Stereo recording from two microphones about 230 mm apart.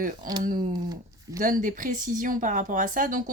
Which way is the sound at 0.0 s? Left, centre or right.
Right.